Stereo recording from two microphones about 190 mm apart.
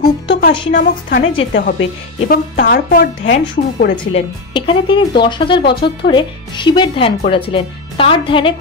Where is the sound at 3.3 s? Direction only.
40° left (ahead or behind).